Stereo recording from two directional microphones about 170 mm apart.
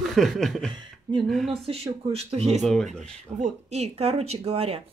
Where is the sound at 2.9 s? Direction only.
45° right (ahead or behind).